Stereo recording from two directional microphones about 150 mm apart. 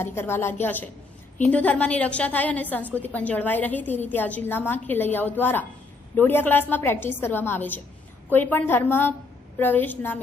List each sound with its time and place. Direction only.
0.0 s a woman's voice: 15° left (ahead or behind)